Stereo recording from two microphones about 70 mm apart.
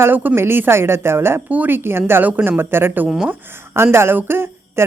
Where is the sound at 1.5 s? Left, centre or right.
Right.